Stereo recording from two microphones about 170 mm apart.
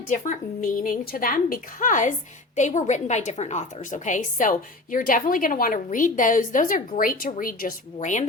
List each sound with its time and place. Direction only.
0.1 s a woman's voice: 50° left (ahead or behind)